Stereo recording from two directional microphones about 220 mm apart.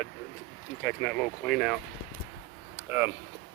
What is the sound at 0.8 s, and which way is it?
Speech, 10° left (ahead or behind).